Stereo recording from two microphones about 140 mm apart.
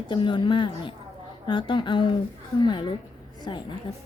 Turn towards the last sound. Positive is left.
turn(degrees=35)  # may be behind; listen again after turning